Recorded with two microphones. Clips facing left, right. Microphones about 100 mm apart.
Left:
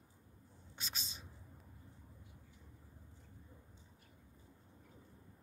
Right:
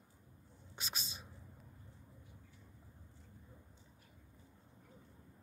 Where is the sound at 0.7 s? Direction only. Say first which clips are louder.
Right 2 dB; 15° right (ahead or behind).